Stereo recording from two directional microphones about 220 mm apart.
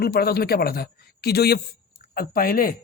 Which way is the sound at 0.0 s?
45° left (ahead or behind).